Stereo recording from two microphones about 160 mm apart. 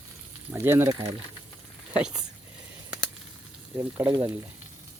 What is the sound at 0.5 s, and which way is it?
Speech, 15° right (ahead or behind).